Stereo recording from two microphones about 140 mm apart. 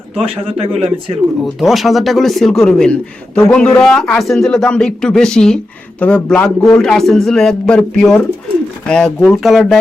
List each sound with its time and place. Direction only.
0.6 s speech: 45° right (ahead or behind)
1.6 s a man's voice: centre (ahead or behind)